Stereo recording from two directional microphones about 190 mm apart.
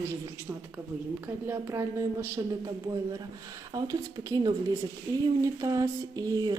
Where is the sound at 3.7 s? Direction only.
20° right (ahead or behind).